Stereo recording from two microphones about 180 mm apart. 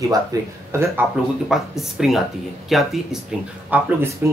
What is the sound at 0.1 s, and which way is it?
Speech, 15° right (ahead or behind).